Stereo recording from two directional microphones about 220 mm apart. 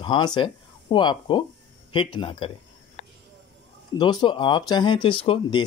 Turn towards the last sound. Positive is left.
turn(degrees=25)  # may be behind; listen again after turning